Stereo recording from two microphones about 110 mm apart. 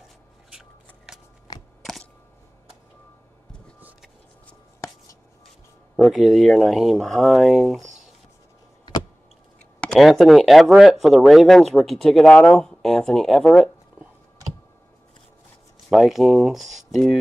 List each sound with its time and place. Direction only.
0.5 s shuffling cards: 5° right (ahead or behind)
1.5 s a sound: 35° left (ahead or behind)
5.9 s speech: centre (ahead or behind)
9.8 s speech: centre (ahead or behind)
15.9 s speech: centre (ahead or behind)